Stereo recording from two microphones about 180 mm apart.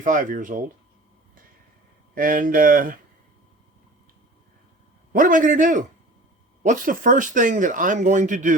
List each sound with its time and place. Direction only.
0.0 s speech: 45° right (ahead or behind)
2.1 s speech: 50° right (ahead or behind)
5.1 s speech: 50° right (ahead or behind)